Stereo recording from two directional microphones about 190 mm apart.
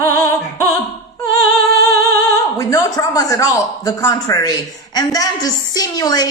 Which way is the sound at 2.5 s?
15° left (ahead or behind).